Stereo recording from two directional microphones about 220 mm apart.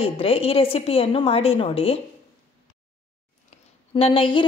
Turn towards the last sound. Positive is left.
turn(degrees=25)  # may be behind; listen again after turning